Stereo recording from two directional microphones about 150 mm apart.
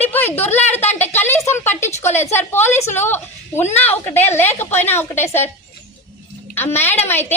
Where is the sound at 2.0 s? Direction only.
50° left (ahead or behind).